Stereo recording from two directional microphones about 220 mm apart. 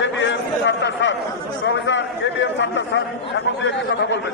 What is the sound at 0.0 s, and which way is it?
Chatter, 55° left (ahead or behind).